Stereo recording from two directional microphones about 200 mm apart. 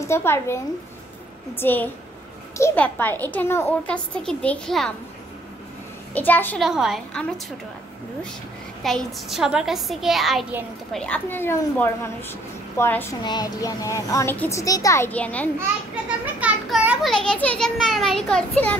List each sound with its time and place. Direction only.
0.0 s a child's voice: 10° left (ahead or behind)
1.6 s a child's voice: 10° left (ahead or behind)
6.1 s a child's voice: 10° left (ahead or behind)
6.6 s a woman's voice: centre (ahead or behind)
8.8 s a woman's voice: centre (ahead or behind)
16.3 s a woman's voice: 5° right (ahead or behind)